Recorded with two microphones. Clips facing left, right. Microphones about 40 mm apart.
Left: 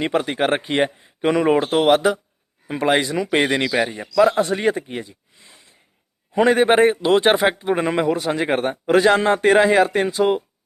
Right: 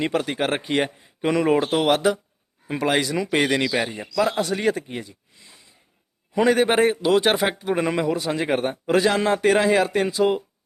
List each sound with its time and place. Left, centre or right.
0.0 s speech: centre
4.4 s speech: left
6.3 s speech: left
8.1 s a man's voice: left